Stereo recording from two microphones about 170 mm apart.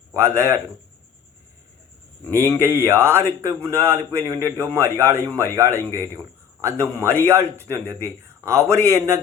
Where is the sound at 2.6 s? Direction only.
15° right (ahead or behind).